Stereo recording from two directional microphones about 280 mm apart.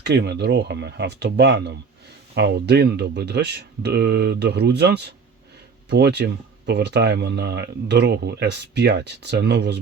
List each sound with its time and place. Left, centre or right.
0.0 s speech: right